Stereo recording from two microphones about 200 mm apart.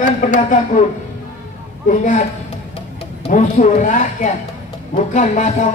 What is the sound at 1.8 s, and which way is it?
Speech, 35° left (ahead or behind).